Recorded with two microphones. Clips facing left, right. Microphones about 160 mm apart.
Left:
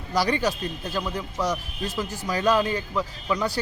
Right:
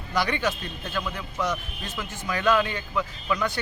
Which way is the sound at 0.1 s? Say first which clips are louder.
Left 2 dB; 35° left (ahead or behind).